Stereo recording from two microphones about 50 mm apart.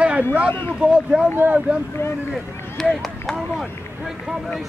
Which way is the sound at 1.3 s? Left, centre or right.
Right.